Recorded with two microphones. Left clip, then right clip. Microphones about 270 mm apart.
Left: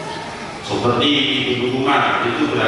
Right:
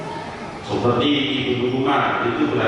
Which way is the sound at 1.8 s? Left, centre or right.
Centre.